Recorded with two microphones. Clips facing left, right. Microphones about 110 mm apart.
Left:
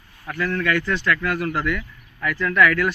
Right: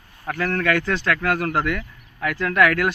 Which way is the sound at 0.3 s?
55° right (ahead or behind).